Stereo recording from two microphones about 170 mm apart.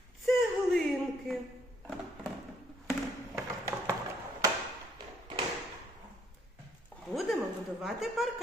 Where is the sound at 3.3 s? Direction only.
15° right (ahead or behind).